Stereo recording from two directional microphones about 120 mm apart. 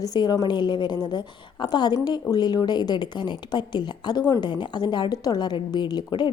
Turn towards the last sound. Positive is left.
turn(degrees=35)  # may be behind; listen again after turning